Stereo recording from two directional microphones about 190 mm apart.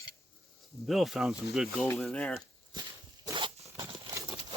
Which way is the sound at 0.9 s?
Centre (ahead or behind).